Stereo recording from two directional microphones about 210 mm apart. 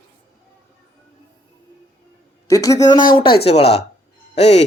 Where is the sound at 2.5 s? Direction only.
15° left (ahead or behind).